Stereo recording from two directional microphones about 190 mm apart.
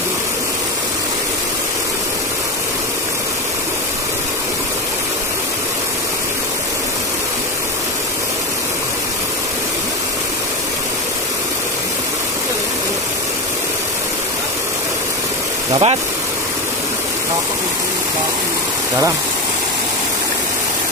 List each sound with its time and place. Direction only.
15.7 s speech: 30° right (ahead or behind)